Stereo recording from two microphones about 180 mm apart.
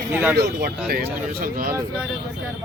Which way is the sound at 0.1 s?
10° right (ahead or behind).